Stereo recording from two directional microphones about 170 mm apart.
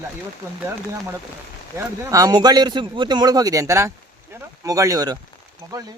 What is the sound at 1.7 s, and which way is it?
Speech, 20° right (ahead or behind).